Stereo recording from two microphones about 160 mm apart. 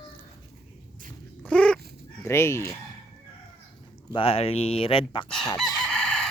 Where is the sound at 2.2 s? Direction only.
15° left (ahead or behind).